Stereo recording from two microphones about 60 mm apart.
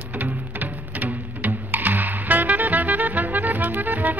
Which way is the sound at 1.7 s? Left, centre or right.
Right.